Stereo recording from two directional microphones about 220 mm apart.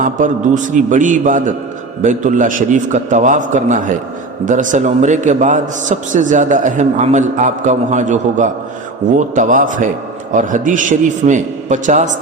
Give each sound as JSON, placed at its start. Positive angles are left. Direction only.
{"t": 0.0, "sound": "a man's voice", "side_deg": -35}